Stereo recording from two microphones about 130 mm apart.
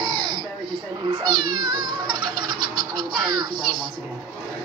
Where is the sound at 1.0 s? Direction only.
35° right (ahead or behind).